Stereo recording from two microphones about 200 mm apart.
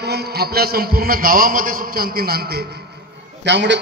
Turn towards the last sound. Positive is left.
turn(degrees=-60)  # may be behind; listen again after turning